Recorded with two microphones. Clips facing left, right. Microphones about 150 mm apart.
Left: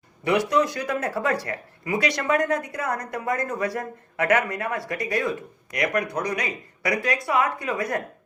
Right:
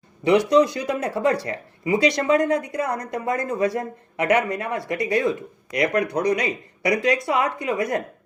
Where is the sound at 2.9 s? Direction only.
30° right (ahead or behind).